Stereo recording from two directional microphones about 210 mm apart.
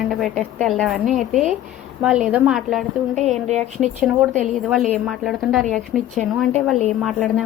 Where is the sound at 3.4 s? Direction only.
35° right (ahead or behind).